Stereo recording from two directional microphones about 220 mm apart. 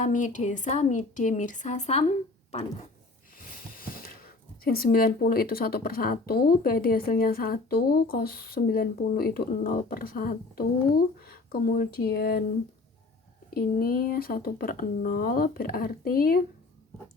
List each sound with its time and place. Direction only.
0.0 s speech: 35° left (ahead or behind)
3.3 s speech: 40° left (ahead or behind)
13.5 s speech: 45° left (ahead or behind)